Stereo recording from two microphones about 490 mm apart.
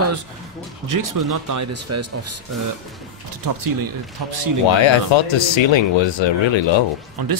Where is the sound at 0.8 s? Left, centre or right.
Right.